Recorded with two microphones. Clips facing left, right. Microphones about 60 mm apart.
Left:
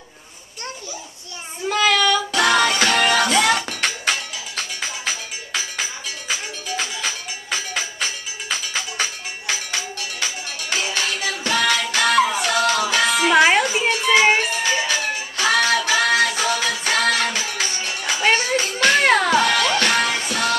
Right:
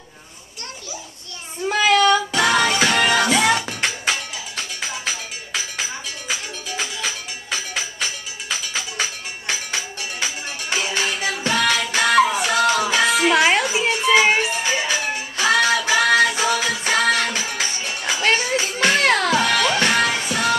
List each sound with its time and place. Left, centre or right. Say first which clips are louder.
1.7 s child singing: right 2 dB; centre
2.3 s music: even; centre
9.5 s music: even; centre
13.3 s children playing: left 2 dB; centre
14.4 s music: even; centre
18.9 s music: left 2 dB; centre
19.4 s music: even; centre